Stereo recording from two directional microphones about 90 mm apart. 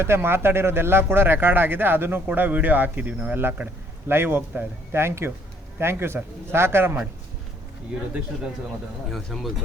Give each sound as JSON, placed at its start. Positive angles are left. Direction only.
{"t": 0.0, "sound": "speech", "side_deg": -25}
{"t": 9.0, "sound": "speech", "side_deg": 0}